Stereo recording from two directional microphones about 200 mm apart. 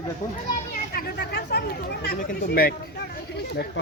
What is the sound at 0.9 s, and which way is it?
Speech, 50° left (ahead or behind).